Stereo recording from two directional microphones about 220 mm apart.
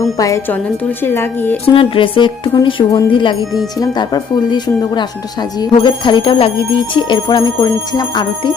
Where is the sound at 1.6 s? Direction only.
25° left (ahead or behind).